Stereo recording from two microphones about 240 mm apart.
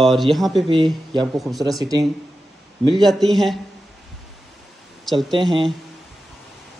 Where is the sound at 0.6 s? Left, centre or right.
Right.